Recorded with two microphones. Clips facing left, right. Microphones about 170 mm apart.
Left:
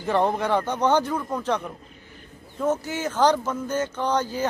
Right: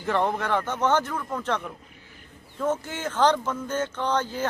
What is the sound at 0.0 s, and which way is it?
A man's voice, 15° left (ahead or behind).